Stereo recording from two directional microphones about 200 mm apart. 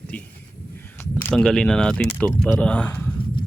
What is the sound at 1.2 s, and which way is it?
Speech, 5° left (ahead or behind).